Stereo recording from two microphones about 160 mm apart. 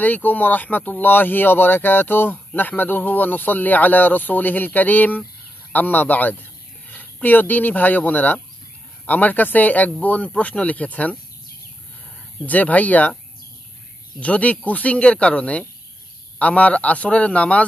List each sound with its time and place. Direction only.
0.0 s speech: 10° left (ahead or behind)
12.4 s speech: 10° left (ahead or behind)
14.2 s speech: 10° left (ahead or behind)